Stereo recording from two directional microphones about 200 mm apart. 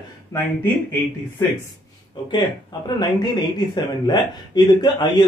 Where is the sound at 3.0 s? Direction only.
20° left (ahead or behind).